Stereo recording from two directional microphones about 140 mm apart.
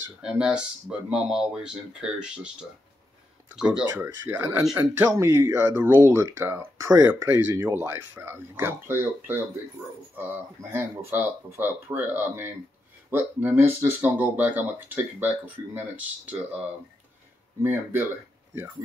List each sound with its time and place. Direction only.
0.2 s speech: 5° right (ahead or behind)
3.5 s speech: 5° right (ahead or behind)
17.6 s speech: 15° right (ahead or behind)